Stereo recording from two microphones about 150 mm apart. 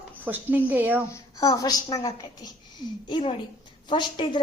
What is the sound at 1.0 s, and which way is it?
A woman's voice, 25° left (ahead or behind).